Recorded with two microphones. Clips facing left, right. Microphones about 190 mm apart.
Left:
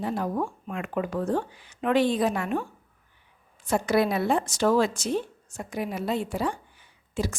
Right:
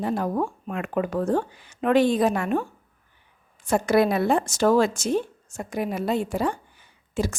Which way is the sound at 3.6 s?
50° right (ahead or behind).